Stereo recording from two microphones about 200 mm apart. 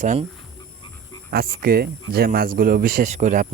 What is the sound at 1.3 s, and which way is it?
Speech, 50° right (ahead or behind).